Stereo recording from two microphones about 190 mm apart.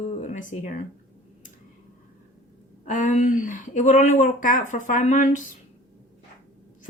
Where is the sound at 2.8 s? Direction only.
40° left (ahead or behind).